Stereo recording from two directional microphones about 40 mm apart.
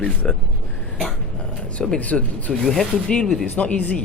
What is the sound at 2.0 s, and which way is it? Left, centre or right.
Speech, left.